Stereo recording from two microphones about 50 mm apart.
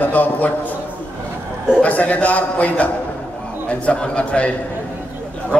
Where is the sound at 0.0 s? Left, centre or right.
Left.